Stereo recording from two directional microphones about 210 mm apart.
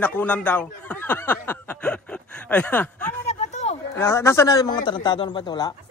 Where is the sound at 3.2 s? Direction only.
30° left (ahead or behind).